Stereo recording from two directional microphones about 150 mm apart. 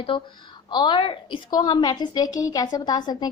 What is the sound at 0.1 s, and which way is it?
A woman's voice, 35° left (ahead or behind).